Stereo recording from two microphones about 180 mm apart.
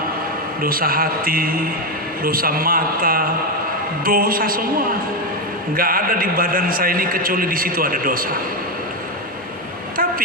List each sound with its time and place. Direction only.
0.6 s a man's voice: 55° right (ahead or behind)
5.7 s a man's voice: 55° right (ahead or behind)